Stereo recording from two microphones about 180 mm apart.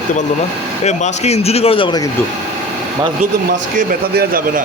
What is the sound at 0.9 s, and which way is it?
A man's voice, 40° left (ahead or behind).